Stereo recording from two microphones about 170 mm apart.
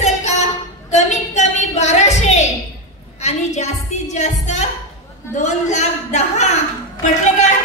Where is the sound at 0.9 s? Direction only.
45° left (ahead or behind).